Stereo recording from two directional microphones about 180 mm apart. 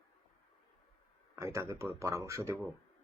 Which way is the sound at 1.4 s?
15° right (ahead or behind).